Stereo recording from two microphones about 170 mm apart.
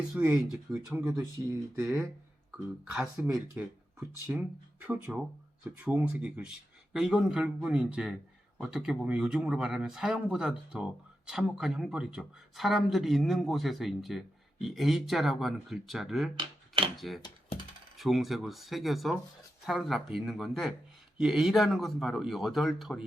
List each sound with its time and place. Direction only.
0.1 s speech: 5° right (ahead or behind)
2.5 s speech: 5° right (ahead or behind)
16.4 s a sound: 30° right (ahead or behind)
17.9 s speech: centre (ahead or behind)